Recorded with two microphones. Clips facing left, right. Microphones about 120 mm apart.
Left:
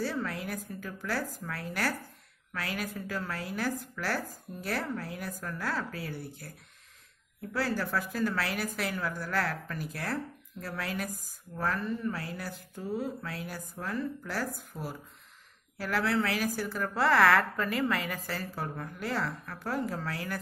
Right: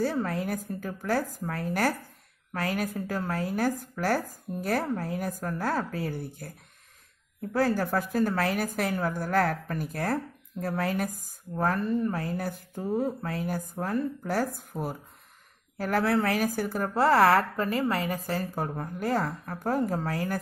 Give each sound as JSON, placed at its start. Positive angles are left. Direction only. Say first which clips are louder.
{"t": 0.0, "sound": "a woman's voice", "louder": "right 5 dB", "side_deg": -45}
{"t": 7.5, "sound": "a woman's voice", "louder": "right 6 dB", "side_deg": -50}